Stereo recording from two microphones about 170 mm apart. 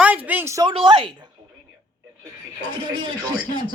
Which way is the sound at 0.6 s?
30° right (ahead or behind).